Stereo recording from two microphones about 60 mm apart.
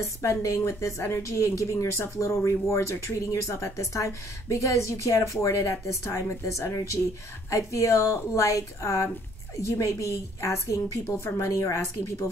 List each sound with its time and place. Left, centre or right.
0.0 s a woman's voice: left